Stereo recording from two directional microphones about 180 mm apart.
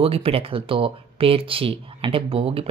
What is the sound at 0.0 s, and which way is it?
Speech, 30° right (ahead or behind).